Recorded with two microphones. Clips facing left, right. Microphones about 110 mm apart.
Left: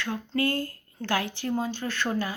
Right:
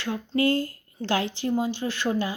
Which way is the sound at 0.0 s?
20° right (ahead or behind).